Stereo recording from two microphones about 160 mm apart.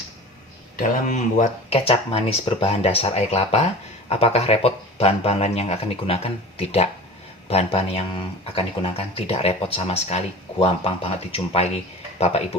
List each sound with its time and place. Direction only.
0.8 s speech: 50° left (ahead or behind)